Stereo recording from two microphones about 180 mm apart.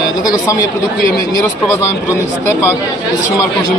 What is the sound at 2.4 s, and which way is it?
Speech, 15° left (ahead or behind).